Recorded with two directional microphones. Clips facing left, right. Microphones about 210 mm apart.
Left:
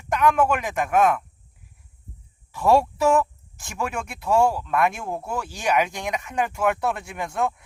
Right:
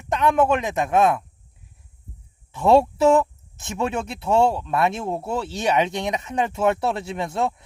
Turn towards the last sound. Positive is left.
turn(degrees=-25)  # may be behind; listen again after turning